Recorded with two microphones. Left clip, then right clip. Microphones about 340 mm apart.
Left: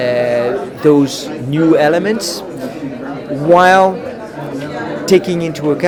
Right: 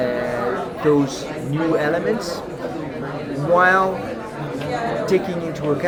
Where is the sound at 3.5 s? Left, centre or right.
Left.